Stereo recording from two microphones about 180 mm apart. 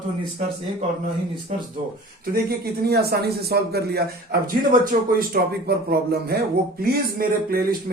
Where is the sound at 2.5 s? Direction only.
60° right (ahead or behind).